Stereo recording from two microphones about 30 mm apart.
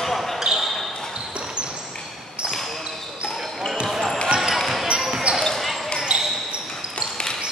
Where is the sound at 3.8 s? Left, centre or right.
Centre.